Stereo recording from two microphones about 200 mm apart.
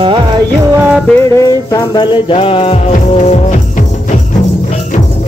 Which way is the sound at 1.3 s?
20° left (ahead or behind).